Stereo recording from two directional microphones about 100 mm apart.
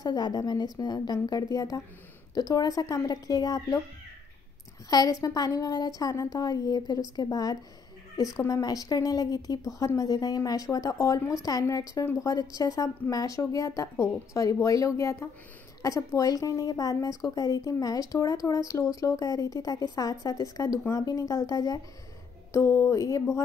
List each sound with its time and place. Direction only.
0.0 s a woman's voice: 45° left (ahead or behind)
4.8 s speech: 40° left (ahead or behind)
22.5 s speech: 25° left (ahead or behind)